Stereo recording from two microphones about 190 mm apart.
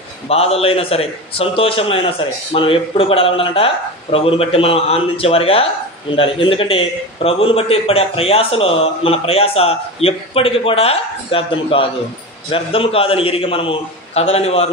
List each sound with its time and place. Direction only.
0.3 s a man's voice: 30° left (ahead or behind)